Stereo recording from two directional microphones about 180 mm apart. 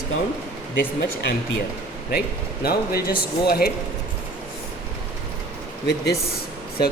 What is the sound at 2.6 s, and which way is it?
Speech, 60° left (ahead or behind).